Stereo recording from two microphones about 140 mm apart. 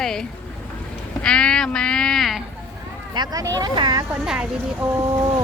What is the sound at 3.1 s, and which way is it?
Speech, 25° right (ahead or behind).